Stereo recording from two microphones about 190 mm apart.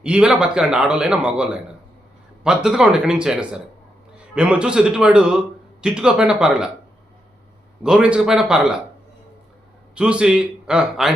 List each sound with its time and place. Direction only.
0.0 s a man's voice: 5° right (ahead or behind)
7.9 s a man's voice: 5° right (ahead or behind)
9.9 s a man's voice: 5° right (ahead or behind)